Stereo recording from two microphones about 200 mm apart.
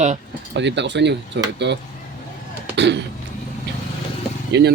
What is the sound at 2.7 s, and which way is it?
Cough, 60° right (ahead or behind).